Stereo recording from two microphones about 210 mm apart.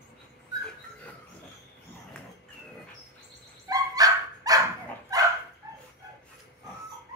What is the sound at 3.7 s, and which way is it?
Dog, 15° right (ahead or behind).